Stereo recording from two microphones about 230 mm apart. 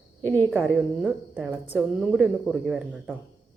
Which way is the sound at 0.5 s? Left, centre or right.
Centre.